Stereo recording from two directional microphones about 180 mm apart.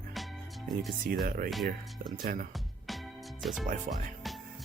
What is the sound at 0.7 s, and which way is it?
Speech, centre (ahead or behind).